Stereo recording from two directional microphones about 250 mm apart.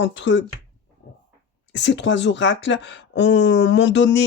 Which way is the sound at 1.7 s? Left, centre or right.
Left.